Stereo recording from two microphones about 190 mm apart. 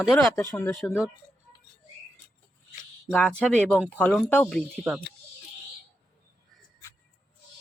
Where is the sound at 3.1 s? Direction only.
5° left (ahead or behind).